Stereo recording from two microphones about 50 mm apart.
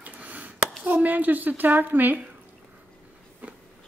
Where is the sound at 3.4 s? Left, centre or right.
Right.